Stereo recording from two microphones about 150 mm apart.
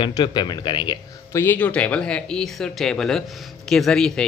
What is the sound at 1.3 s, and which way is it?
A man's voice, 10° left (ahead or behind).